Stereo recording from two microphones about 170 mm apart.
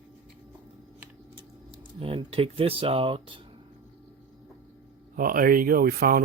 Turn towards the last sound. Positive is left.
turn(degrees=-60)  # may be behind; listen again after turning